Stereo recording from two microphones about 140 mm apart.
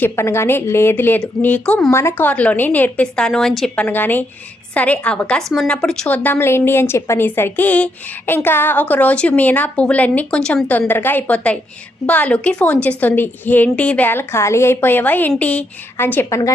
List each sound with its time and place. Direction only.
0.0 s a woman's voice: 20° left (ahead or behind); by 3.8 s centre (ahead or behind)
3.8 s a woman's voice: 15° left (ahead or behind)